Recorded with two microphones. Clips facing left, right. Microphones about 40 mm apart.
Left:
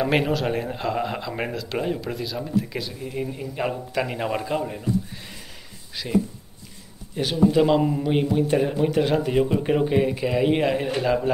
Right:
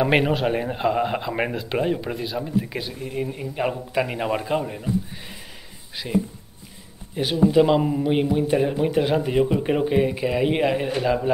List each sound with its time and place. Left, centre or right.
0.0 s speech: centre